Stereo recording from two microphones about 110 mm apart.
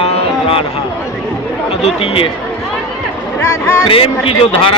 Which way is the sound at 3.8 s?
55° left (ahead or behind).